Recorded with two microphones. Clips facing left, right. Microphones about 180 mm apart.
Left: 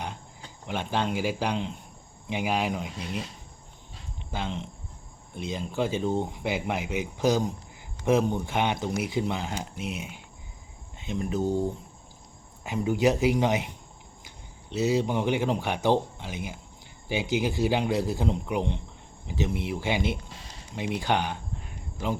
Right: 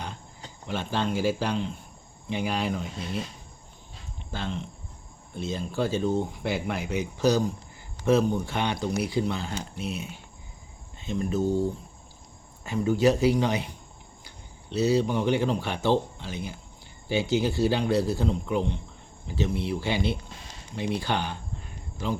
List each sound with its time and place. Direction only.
0.7 s speech: 15° left (ahead or behind)
4.3 s speech: 15° left (ahead or behind)